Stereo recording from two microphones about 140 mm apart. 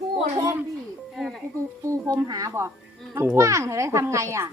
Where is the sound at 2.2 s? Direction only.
25° right (ahead or behind).